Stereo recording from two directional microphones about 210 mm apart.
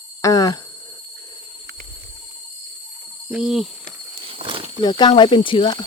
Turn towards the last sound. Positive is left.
turn(degrees=25)  # may be behind; listen again after turning